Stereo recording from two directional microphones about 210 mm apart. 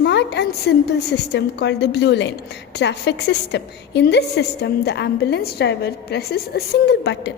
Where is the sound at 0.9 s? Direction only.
50° left (ahead or behind).